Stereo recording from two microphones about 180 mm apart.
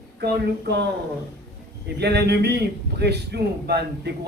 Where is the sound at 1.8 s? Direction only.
65° right (ahead or behind).